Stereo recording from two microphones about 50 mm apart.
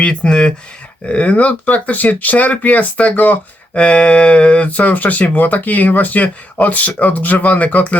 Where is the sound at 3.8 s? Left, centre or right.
Left.